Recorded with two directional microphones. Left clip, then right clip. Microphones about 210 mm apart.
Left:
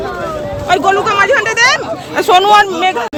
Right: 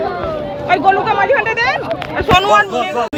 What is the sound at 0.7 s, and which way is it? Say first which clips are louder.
Speech: left 1 dB; 45° left (ahead or behind).